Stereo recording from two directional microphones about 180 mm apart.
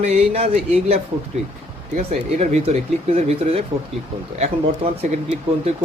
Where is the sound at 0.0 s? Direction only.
35° right (ahead or behind).